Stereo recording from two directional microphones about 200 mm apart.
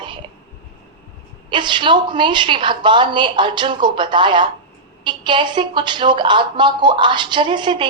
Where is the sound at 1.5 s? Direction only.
25° right (ahead or behind).